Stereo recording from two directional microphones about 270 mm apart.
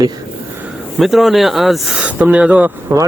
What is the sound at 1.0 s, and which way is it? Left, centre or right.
Speech, centre.